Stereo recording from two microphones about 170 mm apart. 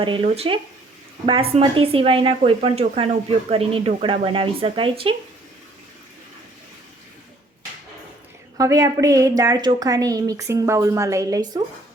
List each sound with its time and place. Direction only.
0.0 s a woman's voice: 30° right (ahead or behind)
8.5 s a woman's voice: 20° right (ahead or behind)